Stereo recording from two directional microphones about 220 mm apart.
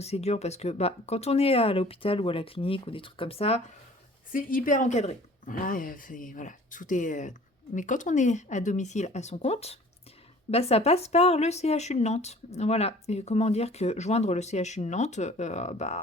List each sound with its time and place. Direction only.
0.0 s speech: 30° left (ahead or behind)
4.3 s speech: 40° left (ahead or behind)